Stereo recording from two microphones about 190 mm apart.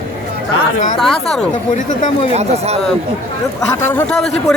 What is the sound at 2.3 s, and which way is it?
Speech, 35° right (ahead or behind).